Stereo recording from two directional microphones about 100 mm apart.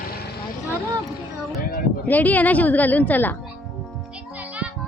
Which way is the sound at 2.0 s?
15° left (ahead or behind).